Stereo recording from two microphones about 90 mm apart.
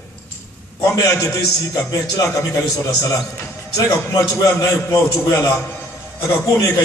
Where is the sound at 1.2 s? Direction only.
40° left (ahead or behind).